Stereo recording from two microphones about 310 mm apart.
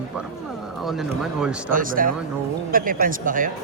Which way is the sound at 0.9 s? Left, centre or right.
Centre.